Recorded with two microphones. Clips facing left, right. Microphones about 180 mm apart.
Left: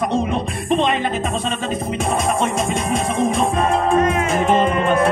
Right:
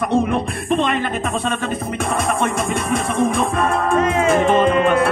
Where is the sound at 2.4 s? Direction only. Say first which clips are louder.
Even; 65° right (ahead or behind).